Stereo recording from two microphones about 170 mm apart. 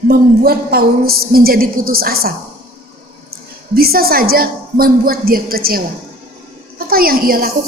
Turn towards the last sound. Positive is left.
turn(degrees=-60)  # may be behind; listen again after turning